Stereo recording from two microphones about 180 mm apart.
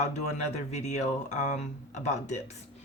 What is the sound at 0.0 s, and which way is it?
Speech, 40° left (ahead or behind).